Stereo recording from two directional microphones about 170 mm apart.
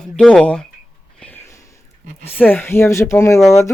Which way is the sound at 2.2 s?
10° left (ahead or behind).